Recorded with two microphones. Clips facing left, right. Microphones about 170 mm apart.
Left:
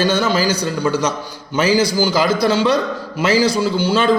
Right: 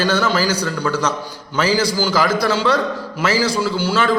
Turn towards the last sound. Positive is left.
turn(degrees=15)  # may be behind; listen again after turning